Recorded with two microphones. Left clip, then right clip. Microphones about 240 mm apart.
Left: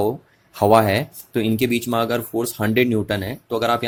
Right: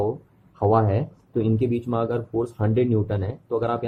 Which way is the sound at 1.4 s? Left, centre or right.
Left.